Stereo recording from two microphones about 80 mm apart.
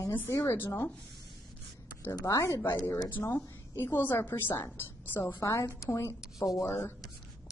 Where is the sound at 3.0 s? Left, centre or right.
Left.